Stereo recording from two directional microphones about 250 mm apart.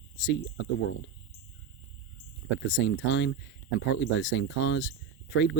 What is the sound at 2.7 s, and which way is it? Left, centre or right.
Speech, left.